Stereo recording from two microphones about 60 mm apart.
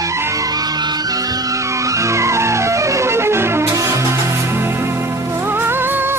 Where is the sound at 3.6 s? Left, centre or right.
Right.